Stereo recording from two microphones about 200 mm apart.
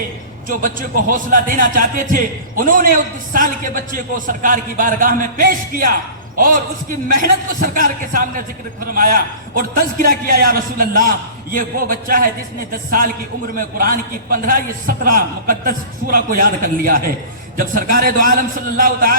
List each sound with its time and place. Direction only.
0.4 s a man's voice: 40° right (ahead or behind)